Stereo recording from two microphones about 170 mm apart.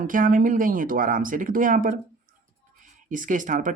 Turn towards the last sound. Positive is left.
turn(degrees=-50)  # may be behind; listen again after turning